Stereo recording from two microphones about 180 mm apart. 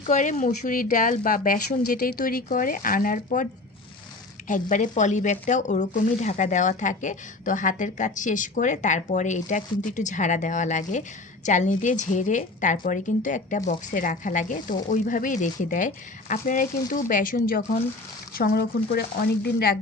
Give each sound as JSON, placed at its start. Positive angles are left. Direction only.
{"t": 0.0, "sound": "speech", "side_deg": 45}
{"t": 4.4, "sound": "speech", "side_deg": 45}